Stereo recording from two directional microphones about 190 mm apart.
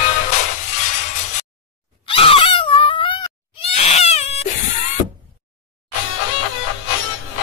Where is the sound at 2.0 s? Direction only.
30° left (ahead or behind).